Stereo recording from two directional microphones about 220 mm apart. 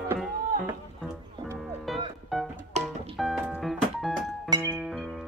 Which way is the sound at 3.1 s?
Centre (ahead or behind).